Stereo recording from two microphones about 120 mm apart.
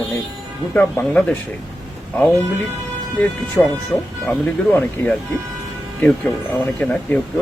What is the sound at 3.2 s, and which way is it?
Speech, 5° left (ahead or behind).